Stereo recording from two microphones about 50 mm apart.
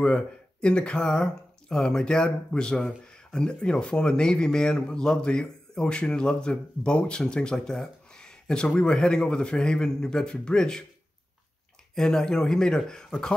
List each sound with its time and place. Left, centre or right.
0.0 s a man's voice: left
11.9 s a man's voice: centre